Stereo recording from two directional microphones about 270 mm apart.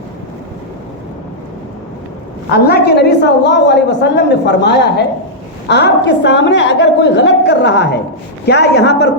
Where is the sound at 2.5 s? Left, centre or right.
Left.